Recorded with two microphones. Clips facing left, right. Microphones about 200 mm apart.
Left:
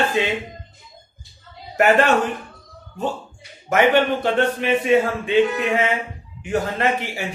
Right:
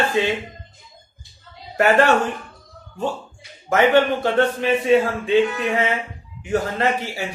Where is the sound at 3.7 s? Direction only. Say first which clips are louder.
Right 1 dB; 15° left (ahead or behind).